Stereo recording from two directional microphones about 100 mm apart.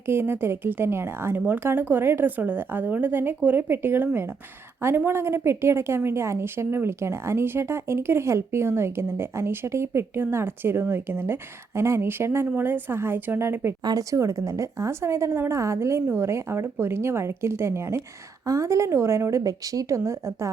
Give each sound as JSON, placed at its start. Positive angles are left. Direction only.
{"t": 0.0, "sound": "a woman's voice", "side_deg": -20}
{"t": 13.8, "sound": "a woman's voice", "side_deg": -35}